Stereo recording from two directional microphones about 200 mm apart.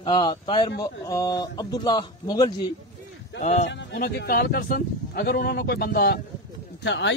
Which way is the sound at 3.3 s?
35° left (ahead or behind).